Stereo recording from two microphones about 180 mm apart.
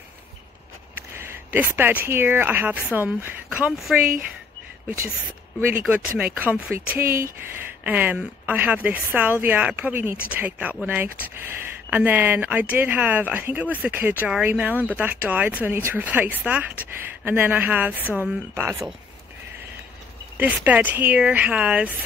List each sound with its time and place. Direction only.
0.9 s speech: 15° right (ahead or behind)
20.3 s speech: 10° right (ahead or behind)